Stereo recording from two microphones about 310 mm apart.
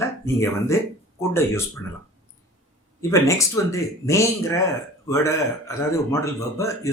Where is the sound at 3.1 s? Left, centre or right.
Centre.